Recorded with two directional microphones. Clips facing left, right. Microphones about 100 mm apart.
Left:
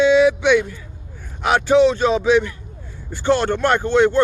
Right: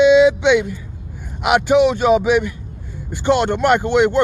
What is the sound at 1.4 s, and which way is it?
A man's voice, 15° right (ahead or behind).